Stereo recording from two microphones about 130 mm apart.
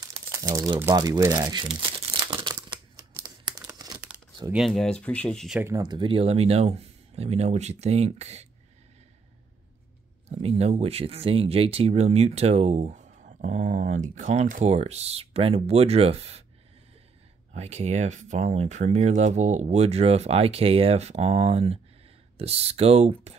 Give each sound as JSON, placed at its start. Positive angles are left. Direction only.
{"t": 0.1, "sound": "crumpling", "side_deg": -25}
{"t": 0.9, "sound": "speech", "side_deg": -30}
{"t": 3.7, "sound": "crumpling", "side_deg": -30}
{"t": 4.5, "sound": "speech", "side_deg": 0}
{"t": 5.8, "sound": "speech", "side_deg": -35}
{"t": 10.2, "sound": "speech", "side_deg": -55}
{"t": 17.5, "sound": "speech", "side_deg": -60}